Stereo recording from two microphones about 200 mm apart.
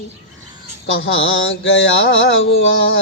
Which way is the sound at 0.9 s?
75° left (ahead or behind).